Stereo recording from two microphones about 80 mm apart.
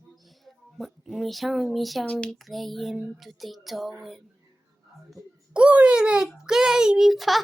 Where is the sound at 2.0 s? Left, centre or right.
Centre.